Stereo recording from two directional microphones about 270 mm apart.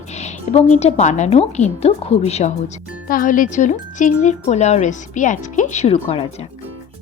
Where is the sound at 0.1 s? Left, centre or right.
Left.